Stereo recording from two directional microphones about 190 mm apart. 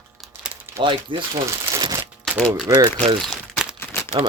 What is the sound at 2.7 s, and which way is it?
Speech, 20° right (ahead or behind).